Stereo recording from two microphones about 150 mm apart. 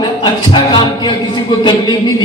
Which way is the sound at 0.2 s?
30° left (ahead or behind).